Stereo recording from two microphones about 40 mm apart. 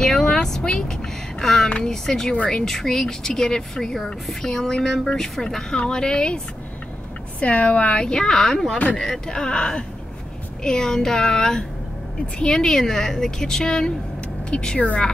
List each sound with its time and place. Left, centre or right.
0.0 s vehicle: centre
1.4 s a sound: centre
1.8 s speech: centre
7.3 s speech: left; by 8.7 s centre
9.3 s speech: centre
14.5 s speech: left